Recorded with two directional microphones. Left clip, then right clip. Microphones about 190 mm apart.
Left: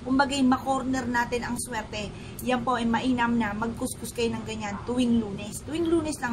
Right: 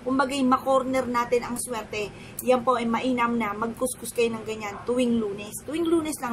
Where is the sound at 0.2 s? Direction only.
10° left (ahead or behind).